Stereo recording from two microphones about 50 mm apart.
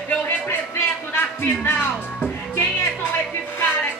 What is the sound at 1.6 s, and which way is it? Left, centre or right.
Music, left.